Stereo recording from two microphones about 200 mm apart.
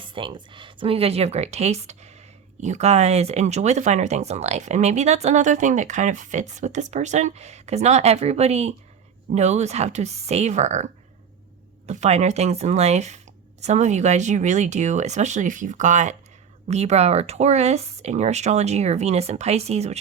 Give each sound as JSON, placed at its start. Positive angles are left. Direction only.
{"t": 0.0, "sound": "speech", "side_deg": -25}
{"t": 11.9, "sound": "speech", "side_deg": -35}